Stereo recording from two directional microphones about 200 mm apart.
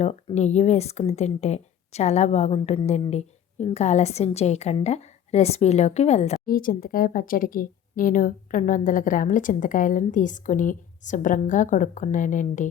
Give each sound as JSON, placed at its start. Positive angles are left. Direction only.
{"t": 0.0, "sound": "speech", "side_deg": 35}